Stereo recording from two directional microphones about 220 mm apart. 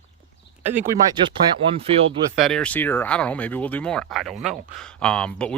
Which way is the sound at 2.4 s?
5° left (ahead or behind).